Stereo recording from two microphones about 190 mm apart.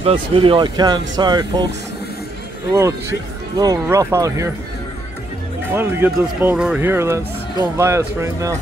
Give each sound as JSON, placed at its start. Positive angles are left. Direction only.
{"t": 0.0, "sound": "speech", "side_deg": -30}
{"t": 3.5, "sound": "speech", "side_deg": -20}
{"t": 5.8, "sound": "speech", "side_deg": -10}